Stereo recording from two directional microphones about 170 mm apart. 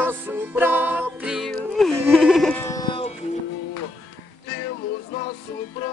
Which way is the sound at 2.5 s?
20° left (ahead or behind).